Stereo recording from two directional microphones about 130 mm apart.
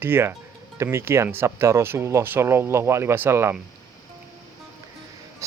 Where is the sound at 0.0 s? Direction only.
15° right (ahead or behind).